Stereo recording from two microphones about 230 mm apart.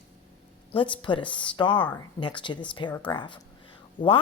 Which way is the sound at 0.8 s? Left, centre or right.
Left.